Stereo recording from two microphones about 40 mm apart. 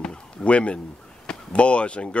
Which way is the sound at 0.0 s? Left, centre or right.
Left.